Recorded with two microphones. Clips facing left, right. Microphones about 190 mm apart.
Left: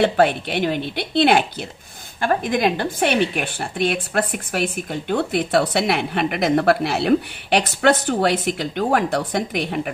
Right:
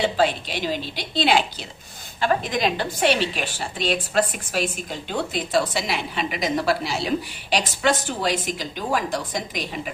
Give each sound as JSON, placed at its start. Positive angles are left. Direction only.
{"t": 0.0, "sound": "a woman's voice", "side_deg": 60}